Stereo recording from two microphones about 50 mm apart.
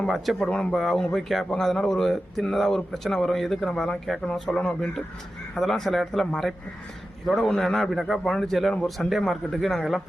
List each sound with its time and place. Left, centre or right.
0.1 s a man's voice: centre
4.0 s speech: centre
4.4 s a man's voice: centre
5.5 s a man's voice: centre